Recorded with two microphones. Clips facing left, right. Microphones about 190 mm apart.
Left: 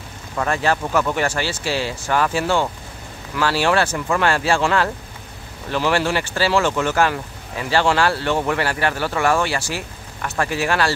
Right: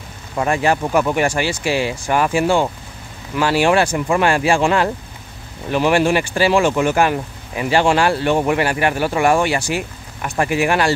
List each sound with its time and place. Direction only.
0.4 s speech: 15° right (ahead or behind)